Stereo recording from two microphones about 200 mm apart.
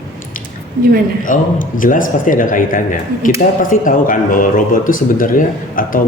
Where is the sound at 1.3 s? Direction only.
40° left (ahead or behind).